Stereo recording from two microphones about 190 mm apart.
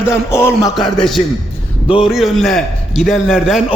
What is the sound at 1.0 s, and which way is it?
A man's voice, centre (ahead or behind).